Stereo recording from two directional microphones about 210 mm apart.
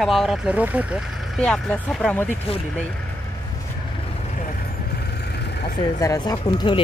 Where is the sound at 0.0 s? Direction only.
Centre (ahead or behind).